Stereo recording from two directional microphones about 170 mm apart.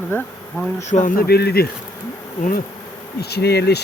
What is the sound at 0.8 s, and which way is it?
Speech, 45° left (ahead or behind).